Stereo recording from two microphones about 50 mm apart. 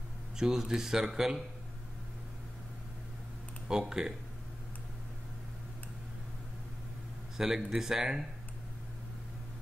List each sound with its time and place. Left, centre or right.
0.4 s speech: centre
3.6 s speech: centre
7.3 s speech: centre